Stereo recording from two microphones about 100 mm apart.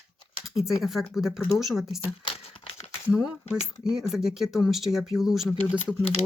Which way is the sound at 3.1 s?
5° right (ahead or behind).